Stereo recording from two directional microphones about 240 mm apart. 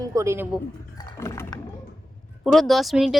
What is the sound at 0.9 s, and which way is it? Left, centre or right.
Roaring cats, centre.